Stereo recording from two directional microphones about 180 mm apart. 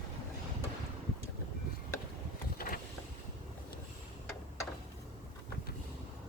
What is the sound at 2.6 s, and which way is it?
Vehicle, 55° left (ahead or behind).